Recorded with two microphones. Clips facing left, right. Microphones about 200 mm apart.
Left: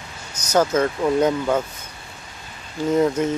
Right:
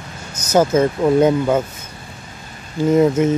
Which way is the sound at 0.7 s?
25° right (ahead or behind).